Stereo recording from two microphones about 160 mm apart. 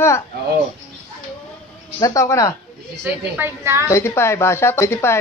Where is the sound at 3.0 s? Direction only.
15° right (ahead or behind).